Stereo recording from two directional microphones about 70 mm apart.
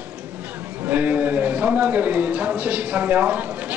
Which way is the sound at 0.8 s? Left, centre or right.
Right.